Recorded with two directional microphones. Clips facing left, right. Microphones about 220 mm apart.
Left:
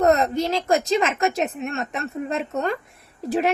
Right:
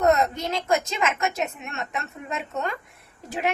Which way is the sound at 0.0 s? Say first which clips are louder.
Left 3 dB; 35° left (ahead or behind).